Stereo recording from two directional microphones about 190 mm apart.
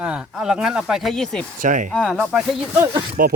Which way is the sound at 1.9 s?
5° left (ahead or behind).